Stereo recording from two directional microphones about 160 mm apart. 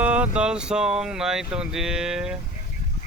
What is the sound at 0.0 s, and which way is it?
Speech, 10° right (ahead or behind).